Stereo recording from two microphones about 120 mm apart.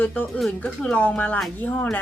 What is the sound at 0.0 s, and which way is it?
Speech, 15° left (ahead or behind).